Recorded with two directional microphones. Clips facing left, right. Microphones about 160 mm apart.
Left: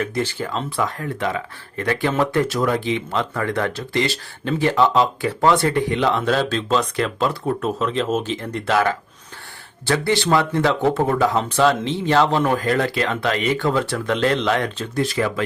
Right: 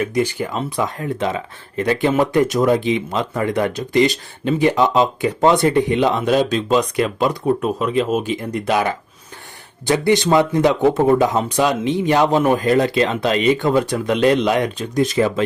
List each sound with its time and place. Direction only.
0.0 s speech: 15° right (ahead or behind)